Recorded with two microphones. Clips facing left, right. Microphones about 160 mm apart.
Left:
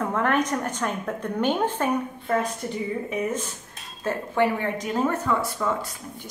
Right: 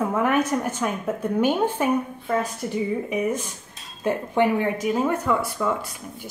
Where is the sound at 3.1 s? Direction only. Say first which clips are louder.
Right 3 dB; 15° right (ahead or behind).